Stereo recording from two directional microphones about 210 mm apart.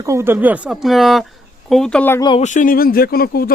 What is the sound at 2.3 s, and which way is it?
Speech, 35° left (ahead or behind).